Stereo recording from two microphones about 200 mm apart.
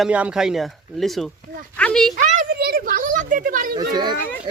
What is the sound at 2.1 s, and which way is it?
Speech, 40° right (ahead or behind).